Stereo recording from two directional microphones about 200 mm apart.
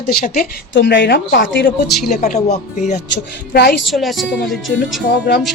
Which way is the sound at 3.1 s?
55° left (ahead or behind).